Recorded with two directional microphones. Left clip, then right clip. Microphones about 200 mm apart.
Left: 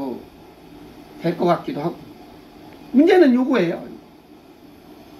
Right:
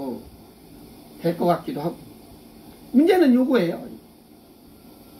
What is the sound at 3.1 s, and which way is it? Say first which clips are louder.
Speech: left 3 dB; 5° right (ahead or behind).